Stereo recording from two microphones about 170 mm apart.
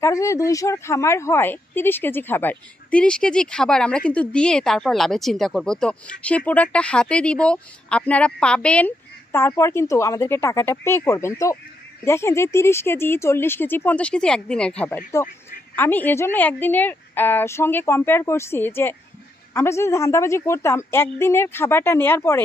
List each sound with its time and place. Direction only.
0.0 s a woman's voice: 20° left (ahead or behind)